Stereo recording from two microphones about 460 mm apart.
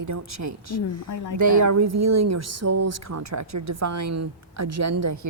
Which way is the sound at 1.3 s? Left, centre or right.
Right.